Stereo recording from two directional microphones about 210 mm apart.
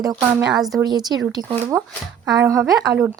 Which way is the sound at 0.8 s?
20° right (ahead or behind).